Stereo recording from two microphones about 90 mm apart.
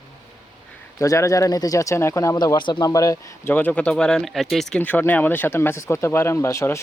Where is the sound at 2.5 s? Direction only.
60° left (ahead or behind).